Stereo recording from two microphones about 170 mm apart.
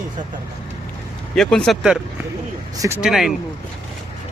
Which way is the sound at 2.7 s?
20° right (ahead or behind).